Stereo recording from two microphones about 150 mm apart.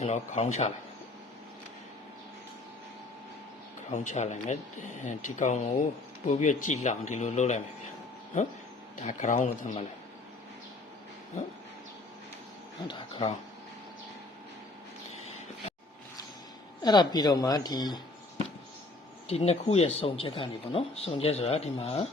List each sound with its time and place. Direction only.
0.0 s speech: 50° left (ahead or behind)
3.9 s speech: 55° left (ahead or behind)
9.0 s a man's voice: 55° left (ahead or behind)
12.9 s speech: 35° left (ahead or behind)
16.8 s speech: 25° left (ahead or behind)
19.3 s speech: 45° left (ahead or behind)